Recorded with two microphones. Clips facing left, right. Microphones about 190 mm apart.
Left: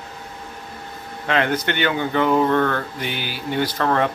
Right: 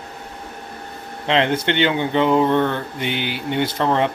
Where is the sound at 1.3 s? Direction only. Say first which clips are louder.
Right 2 dB; 25° right (ahead or behind).